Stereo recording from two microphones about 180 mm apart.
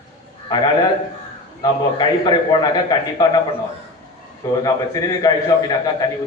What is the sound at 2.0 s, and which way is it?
A man's voice, 25° left (ahead or behind).